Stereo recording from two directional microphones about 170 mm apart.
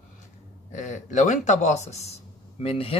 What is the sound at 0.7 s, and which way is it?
Speech, 45° left (ahead or behind).